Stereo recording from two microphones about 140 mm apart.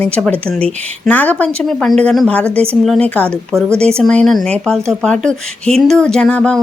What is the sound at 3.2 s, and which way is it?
Speech, 20° right (ahead or behind).